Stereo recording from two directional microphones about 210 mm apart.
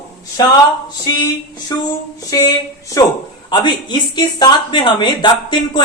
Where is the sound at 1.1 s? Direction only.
20° left (ahead or behind).